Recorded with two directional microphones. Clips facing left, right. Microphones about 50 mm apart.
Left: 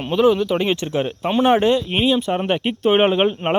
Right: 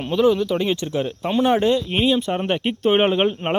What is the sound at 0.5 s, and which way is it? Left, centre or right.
Speech, left.